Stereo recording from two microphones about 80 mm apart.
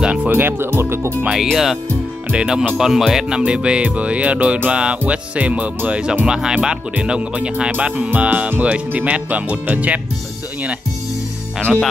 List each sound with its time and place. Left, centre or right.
0.0 s music: centre
0.3 s speech: right
1.2 s speech: centre